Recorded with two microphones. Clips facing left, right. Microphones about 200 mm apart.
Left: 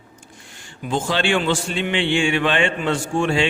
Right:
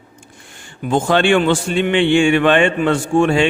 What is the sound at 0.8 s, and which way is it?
A man's voice, 55° right (ahead or behind).